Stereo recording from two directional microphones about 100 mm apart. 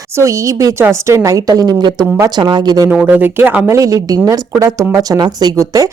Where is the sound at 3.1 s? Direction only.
20° right (ahead or behind).